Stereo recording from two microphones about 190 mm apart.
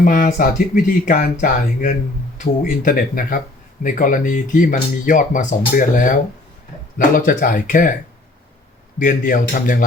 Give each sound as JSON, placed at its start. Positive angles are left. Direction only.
{"t": 0.0, "sound": "speech", "side_deg": 45}
{"t": 7.2, "sound": "speech", "side_deg": 45}
{"t": 9.0, "sound": "speech", "side_deg": 45}